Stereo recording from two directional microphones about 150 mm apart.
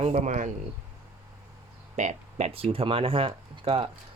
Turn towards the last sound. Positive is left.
turn(degrees=-40)  # may be behind; listen again after turning